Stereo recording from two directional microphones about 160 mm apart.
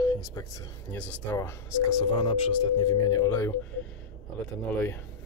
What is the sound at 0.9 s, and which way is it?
Speech, 10° left (ahead or behind).